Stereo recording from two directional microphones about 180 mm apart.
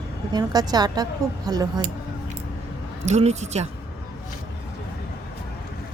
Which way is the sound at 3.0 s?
40° right (ahead or behind).